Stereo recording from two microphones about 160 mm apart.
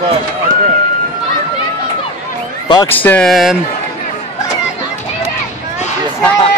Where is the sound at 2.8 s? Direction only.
10° left (ahead or behind).